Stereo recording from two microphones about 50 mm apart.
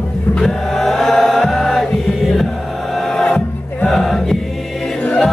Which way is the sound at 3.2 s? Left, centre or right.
Centre.